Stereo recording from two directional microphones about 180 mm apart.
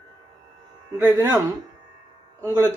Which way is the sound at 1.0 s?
10° right (ahead or behind).